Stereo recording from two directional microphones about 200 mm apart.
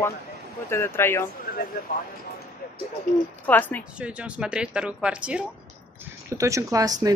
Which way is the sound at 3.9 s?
5° right (ahead or behind).